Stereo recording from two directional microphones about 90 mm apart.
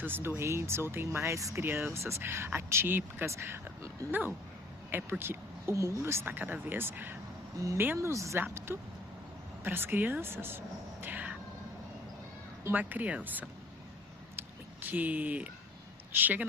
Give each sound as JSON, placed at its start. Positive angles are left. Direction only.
{"t": 0.0, "sound": "speech", "side_deg": -25}
{"t": 4.9, "sound": "speech", "side_deg": -25}
{"t": 7.9, "sound": "speech", "side_deg": -35}
{"t": 11.0, "sound": "a sound", "side_deg": -15}
{"t": 12.7, "sound": "speech", "side_deg": -20}
{"t": 14.3, "sound": "a sound", "side_deg": -20}
{"t": 16.1, "sound": "speech", "side_deg": -20}